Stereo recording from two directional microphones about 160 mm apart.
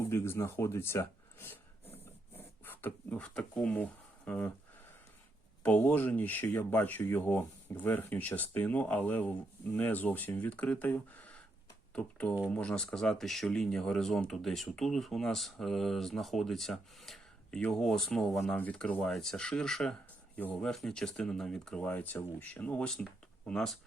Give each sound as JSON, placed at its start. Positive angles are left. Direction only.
{"t": 0.0, "sound": "speech", "side_deg": 15}
{"t": 5.6, "sound": "speech", "side_deg": 10}